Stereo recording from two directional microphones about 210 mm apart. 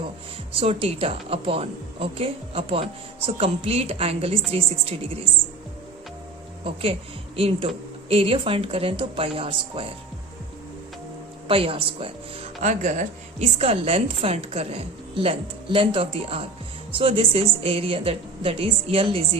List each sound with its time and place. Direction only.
0.5 s speech: 25° right (ahead or behind)
7.3 s speech: 25° right (ahead or behind)
11.4 s speech: 25° right (ahead or behind)